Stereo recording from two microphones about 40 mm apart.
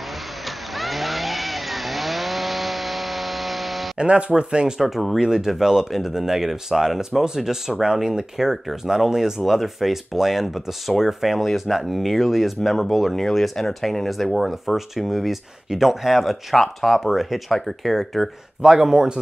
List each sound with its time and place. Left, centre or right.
0.7 s chainsaw: centre
4.0 s speech: right
4.7 s speech: centre
10.4 s speech: centre
11.1 s speech: centre
13.1 s speech: centre
18.6 s speech: centre